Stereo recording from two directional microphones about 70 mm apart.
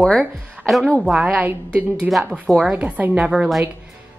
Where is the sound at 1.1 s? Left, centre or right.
Centre.